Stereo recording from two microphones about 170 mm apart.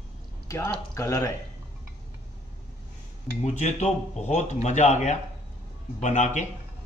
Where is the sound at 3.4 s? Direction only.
40° left (ahead or behind).